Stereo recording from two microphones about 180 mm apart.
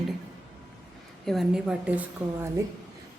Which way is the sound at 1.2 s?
Centre (ahead or behind).